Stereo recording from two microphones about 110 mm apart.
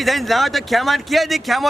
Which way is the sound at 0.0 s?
Centre (ahead or behind).